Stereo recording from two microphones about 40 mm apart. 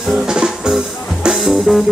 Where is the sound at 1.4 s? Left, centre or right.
Centre.